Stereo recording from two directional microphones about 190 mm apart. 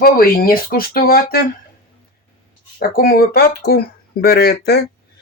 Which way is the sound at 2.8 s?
55° left (ahead or behind).